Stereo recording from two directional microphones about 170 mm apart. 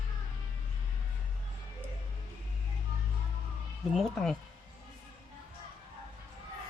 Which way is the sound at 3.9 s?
Centre (ahead or behind).